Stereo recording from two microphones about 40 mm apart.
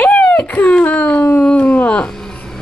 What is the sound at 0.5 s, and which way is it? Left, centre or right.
Speech, left.